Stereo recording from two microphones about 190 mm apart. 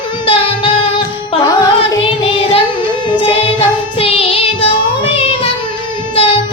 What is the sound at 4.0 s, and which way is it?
Child singing, 30° left (ahead or behind).